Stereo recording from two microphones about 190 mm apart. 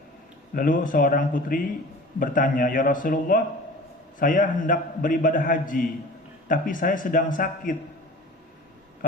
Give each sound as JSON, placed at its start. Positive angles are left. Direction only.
{"t": 0.5, "sound": "a man's voice", "side_deg": 45}